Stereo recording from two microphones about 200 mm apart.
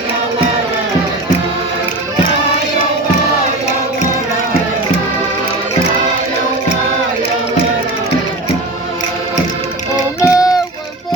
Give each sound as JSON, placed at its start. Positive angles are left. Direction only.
{"t": 10.2, "sound": "music", "side_deg": 15}